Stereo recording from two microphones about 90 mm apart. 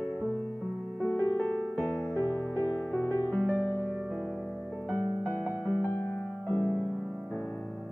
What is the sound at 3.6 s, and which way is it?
Music, 25° left (ahead or behind).